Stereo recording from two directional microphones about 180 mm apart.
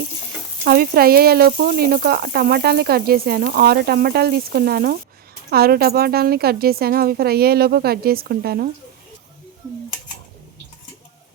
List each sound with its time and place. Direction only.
0.6 s speech: 55° right (ahead or behind)